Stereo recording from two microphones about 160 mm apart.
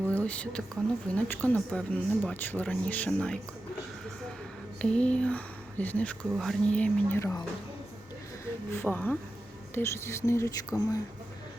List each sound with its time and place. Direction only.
0.1 s speech: 10° left (ahead or behind)
4.8 s speech: 5° left (ahead or behind)
8.7 s speech: 15° left (ahead or behind)